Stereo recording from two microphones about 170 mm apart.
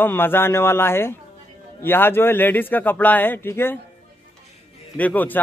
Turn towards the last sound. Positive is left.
turn(degrees=10)  # may be behind; listen again after turning